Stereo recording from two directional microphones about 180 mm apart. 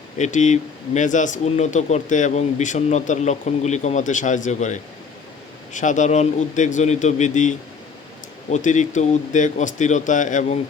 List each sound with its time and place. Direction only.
0.2 s speech: 40° left (ahead or behind)